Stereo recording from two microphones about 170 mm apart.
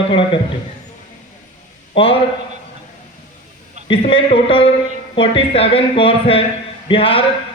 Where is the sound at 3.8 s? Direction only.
35° left (ahead or behind).